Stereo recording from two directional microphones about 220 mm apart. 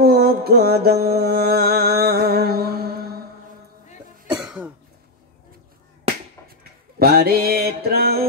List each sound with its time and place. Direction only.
0.0 s music: 45° right (ahead or behind)
4.3 s cough: 5° right (ahead or behind)
7.0 s mantra: 45° right (ahead or behind)